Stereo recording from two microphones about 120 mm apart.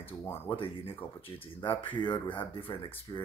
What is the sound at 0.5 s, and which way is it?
Speech, 45° left (ahead or behind).